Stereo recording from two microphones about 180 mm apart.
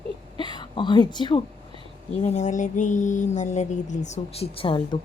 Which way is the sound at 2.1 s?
35° left (ahead or behind).